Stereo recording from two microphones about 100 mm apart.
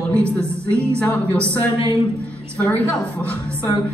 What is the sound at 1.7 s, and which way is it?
Speech, 30° right (ahead or behind).